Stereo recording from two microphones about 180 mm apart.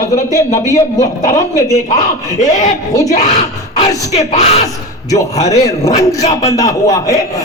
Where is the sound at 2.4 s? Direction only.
40° left (ahead or behind).